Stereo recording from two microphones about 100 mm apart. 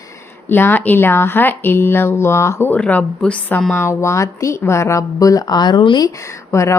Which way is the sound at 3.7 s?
30° left (ahead or behind).